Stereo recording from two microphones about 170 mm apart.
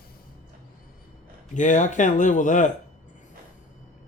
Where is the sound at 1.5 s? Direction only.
45° left (ahead or behind).